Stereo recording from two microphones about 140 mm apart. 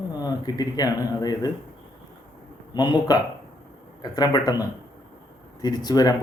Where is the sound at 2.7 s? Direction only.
30° left (ahead or behind).